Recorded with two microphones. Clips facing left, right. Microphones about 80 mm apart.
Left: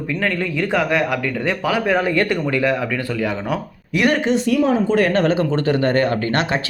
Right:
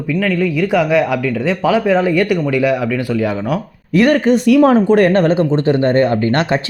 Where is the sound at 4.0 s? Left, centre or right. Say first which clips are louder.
Right 6 dB; right.